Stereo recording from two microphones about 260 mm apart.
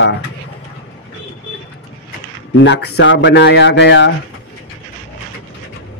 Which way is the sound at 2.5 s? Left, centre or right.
Left.